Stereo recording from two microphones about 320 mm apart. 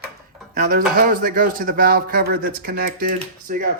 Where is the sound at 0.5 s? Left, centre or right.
Right.